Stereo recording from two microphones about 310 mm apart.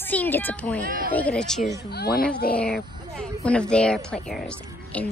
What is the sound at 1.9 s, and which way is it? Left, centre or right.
Speech, left.